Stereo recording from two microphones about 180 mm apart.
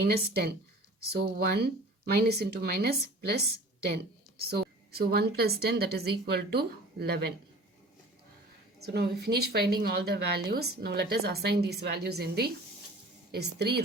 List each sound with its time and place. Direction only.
0.0 s speech: 65° right (ahead or behind)
8.8 s speech: 65° right (ahead or behind)